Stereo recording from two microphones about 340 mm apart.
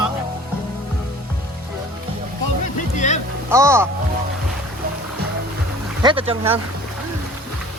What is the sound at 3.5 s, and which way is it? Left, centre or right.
Speech, centre.